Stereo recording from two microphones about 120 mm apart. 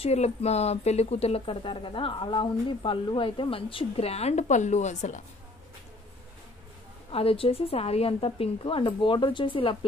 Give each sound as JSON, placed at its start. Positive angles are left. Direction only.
{"t": 0.0, "sound": "speech", "side_deg": 60}
{"t": 7.1, "sound": "a woman's voice", "side_deg": 50}